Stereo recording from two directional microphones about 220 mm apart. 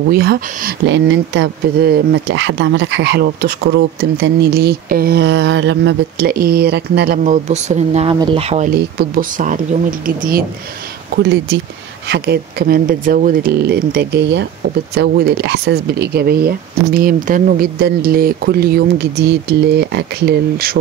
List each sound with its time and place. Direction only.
0.1 s speech: 45° right (ahead or behind)
7.2 s speech: 30° right (ahead or behind)
12.1 s speech: 45° right (ahead or behind)